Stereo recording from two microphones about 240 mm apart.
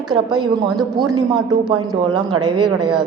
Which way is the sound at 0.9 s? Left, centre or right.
Centre.